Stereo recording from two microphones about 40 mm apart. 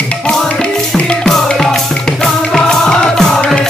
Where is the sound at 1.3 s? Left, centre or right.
Centre.